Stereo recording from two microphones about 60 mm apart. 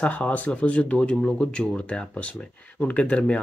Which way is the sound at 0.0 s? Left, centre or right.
Left.